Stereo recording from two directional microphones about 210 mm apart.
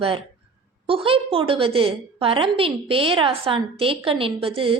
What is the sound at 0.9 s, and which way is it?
A woman's voice, 25° right (ahead or behind).